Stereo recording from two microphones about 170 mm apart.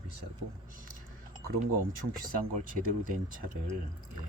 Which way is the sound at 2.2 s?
55° right (ahead or behind).